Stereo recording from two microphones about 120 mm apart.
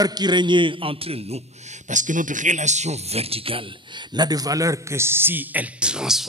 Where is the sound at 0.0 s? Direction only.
35° right (ahead or behind); by 1.4 s 55° right (ahead or behind).